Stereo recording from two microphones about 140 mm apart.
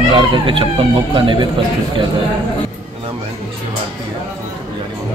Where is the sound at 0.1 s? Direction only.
35° right (ahead or behind).